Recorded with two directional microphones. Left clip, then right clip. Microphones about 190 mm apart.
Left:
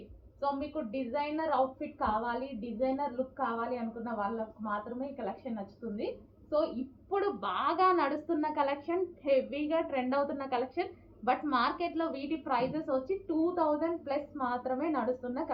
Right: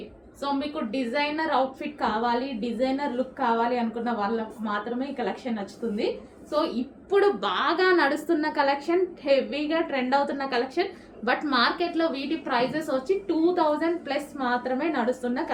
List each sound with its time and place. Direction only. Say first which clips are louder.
0.9 s a woman's voice: right 8 dB; 20° right (ahead or behind)
7.1 s a woman's voice: right 10 dB; 25° right (ahead or behind)